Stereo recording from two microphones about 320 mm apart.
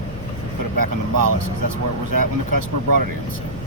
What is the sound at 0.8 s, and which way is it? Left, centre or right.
Speech, right.